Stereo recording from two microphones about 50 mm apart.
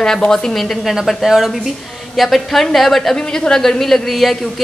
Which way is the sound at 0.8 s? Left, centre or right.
Centre.